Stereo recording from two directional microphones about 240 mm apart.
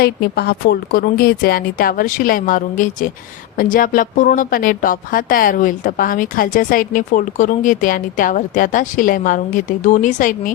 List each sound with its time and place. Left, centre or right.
0.0 s speech: left